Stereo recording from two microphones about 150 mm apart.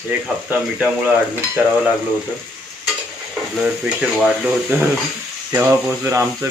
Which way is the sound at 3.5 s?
5° right (ahead or behind).